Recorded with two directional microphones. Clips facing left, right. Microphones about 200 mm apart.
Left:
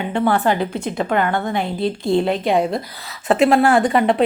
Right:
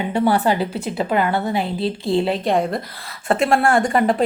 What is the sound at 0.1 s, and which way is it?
A woman's voice, 10° right (ahead or behind).